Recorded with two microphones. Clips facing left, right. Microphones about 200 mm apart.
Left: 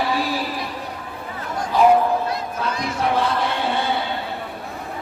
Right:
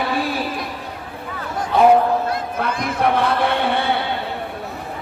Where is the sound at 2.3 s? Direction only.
55° right (ahead or behind).